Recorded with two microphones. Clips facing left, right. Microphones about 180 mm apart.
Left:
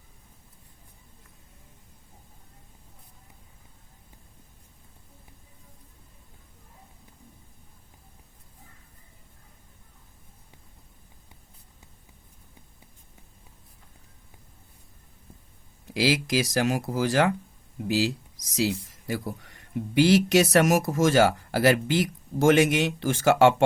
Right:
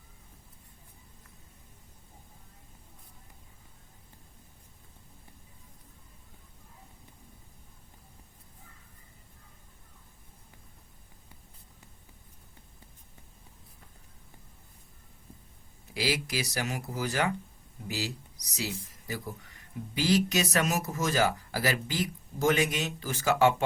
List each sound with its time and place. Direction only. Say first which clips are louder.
15.9 s speech: left 7 dB; 85° left
18.5 s speech: left 10 dB; 80° left